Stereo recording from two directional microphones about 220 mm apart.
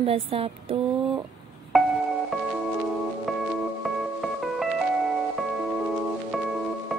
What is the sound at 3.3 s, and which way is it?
Music, centre (ahead or behind).